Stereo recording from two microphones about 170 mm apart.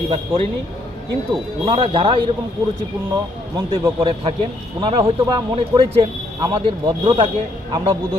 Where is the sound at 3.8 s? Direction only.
25° right (ahead or behind).